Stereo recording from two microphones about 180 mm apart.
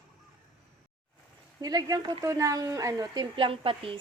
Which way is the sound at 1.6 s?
20° right (ahead or behind).